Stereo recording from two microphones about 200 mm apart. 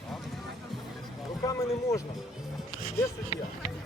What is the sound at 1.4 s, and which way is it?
Speech, 15° left (ahead or behind).